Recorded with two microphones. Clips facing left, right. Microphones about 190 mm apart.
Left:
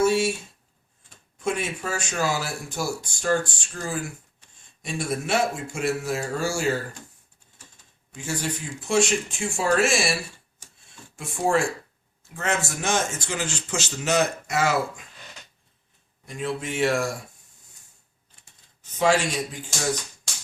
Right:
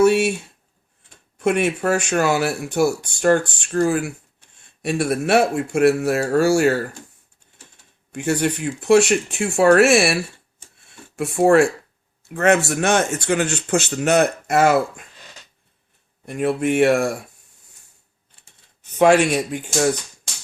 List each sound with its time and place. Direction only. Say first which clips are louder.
0.0 s a sound: right 6 dB; 65° right (ahead or behind)
1.4 s speech: right 9 dB; 65° right (ahead or behind)
8.1 s speech: right 9 dB; 65° right (ahead or behind)
10.8 s a sound: right 13 dB; 65° right (ahead or behind)
12.3 s speech: right 11 dB; 65° right (ahead or behind)
16.2 s speech: right 9 dB; 60° right (ahead or behind)
18.8 s speech: right 7 dB; 60° right (ahead or behind)